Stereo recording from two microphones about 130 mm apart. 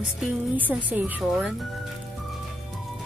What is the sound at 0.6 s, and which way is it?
Speech, 10° right (ahead or behind).